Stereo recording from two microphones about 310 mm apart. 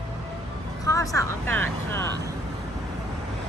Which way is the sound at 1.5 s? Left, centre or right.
Right.